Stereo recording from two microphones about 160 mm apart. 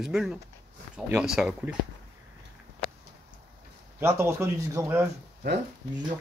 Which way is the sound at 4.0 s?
15° right (ahead or behind).